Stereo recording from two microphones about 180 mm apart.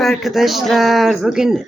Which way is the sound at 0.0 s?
Centre (ahead or behind).